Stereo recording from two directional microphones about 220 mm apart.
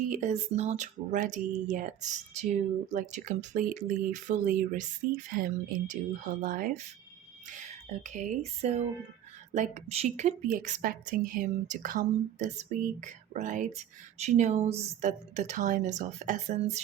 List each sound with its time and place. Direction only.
0.1 s a woman's voice: 35° right (ahead or behind)
9.6 s a woman's voice: 30° right (ahead or behind)